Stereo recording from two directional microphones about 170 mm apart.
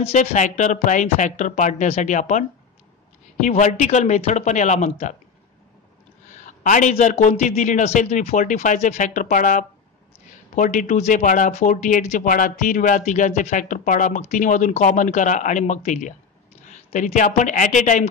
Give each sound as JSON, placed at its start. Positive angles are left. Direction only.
{"t": 0.0, "sound": "speech", "side_deg": 45}
{"t": 6.3, "sound": "speech", "side_deg": 50}